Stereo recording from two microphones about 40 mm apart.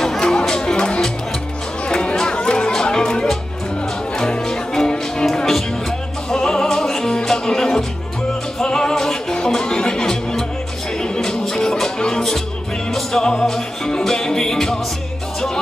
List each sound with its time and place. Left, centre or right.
0.0 s music: centre
1.9 s chatter: left
2.7 s music: centre